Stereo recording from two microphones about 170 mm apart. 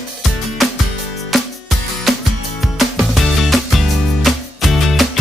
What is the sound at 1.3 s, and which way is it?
Music, centre (ahead or behind).